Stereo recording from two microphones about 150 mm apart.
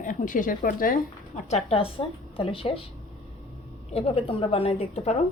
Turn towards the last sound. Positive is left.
turn(degrees=45)  # may be behind; listen again after turning